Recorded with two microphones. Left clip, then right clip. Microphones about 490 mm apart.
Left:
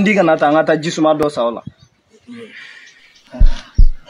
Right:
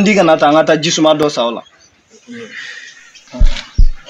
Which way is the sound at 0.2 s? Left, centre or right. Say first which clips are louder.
Right 3 dB; left.